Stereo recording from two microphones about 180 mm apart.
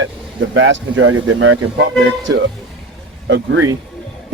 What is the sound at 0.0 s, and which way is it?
Speech, 90° right.